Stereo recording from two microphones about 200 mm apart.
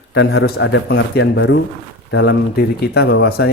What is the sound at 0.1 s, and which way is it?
A man's voice, 60° left (ahead or behind).